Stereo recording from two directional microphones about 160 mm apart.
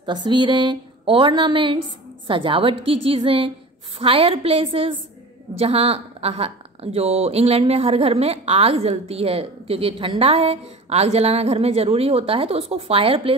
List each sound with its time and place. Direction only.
0.0 s a woman's voice: 30° right (ahead or behind)